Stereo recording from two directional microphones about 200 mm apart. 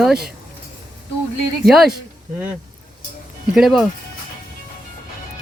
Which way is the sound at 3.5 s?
Centre (ahead or behind).